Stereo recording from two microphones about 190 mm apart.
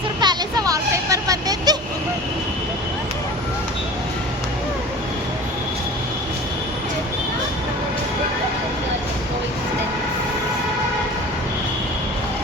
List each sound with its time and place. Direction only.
0.2 s music: 20° right (ahead or behind)